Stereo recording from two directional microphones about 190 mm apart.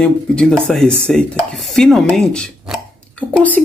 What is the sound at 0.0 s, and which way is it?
Speech, 5° left (ahead or behind).